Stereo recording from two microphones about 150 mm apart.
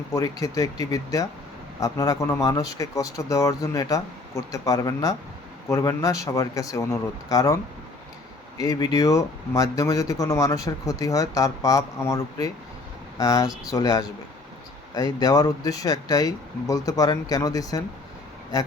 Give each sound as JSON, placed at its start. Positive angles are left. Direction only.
{"t": 0.1, "sound": "speech", "side_deg": 25}